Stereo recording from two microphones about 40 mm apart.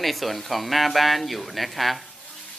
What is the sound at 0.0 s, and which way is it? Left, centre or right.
Speech, centre.